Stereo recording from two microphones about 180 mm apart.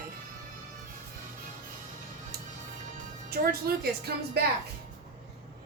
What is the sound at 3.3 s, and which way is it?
A woman's voice, 60° right (ahead or behind).